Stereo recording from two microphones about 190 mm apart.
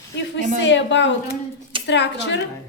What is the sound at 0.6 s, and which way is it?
A woman's voice, 70° left (ahead or behind).